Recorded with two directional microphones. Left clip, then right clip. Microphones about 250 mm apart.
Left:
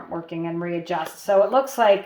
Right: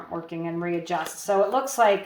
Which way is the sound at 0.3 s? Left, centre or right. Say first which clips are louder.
Left 1 dB; left.